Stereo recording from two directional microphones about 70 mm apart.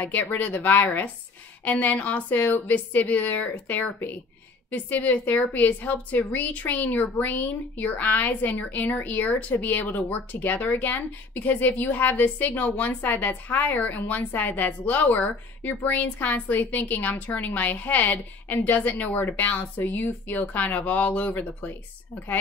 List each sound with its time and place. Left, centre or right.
0.0 s a woman's voice: left